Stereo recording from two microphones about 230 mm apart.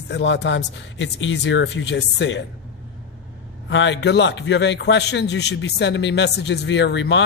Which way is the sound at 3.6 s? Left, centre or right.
Left.